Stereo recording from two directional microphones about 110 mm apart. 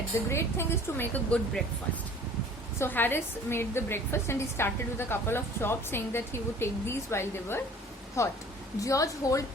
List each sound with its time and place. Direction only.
0.3 s a woman's voice: 25° left (ahead or behind)
2.7 s a woman's voice: 20° left (ahead or behind)